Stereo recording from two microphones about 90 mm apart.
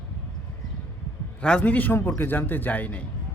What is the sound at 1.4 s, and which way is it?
A man's voice, 10° left (ahead or behind).